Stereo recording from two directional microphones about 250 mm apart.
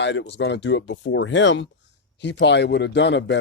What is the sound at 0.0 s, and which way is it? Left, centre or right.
Speech, left.